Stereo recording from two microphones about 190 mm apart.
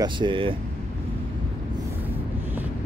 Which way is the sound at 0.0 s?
25° right (ahead or behind).